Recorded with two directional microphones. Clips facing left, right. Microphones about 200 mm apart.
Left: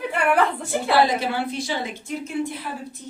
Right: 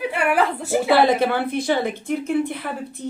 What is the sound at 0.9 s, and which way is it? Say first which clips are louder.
A woman's voice: right 2 dB; 55° right (ahead or behind).